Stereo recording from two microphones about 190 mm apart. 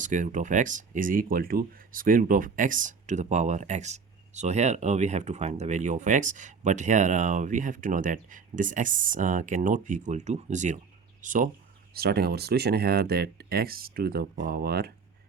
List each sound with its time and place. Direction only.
0.0 s speech: 40° right (ahead or behind)
11.9 s speech: 55° right (ahead or behind)